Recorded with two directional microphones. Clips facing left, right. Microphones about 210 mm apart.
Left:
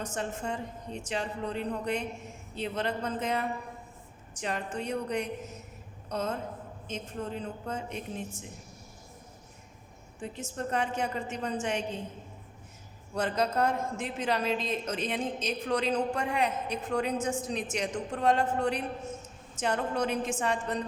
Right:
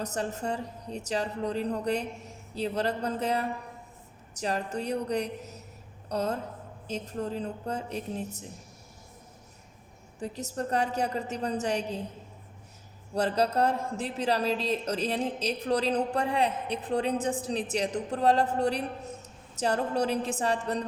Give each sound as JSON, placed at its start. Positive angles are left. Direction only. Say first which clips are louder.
{"t": 0.0, "sound": "a man's voice", "louder": "right 2 dB", "side_deg": -40}
{"t": 10.2, "sound": "a man's voice", "louder": "right 3 dB", "side_deg": -40}
{"t": 13.1, "sound": "a man's voice", "louder": "right 3 dB", "side_deg": -35}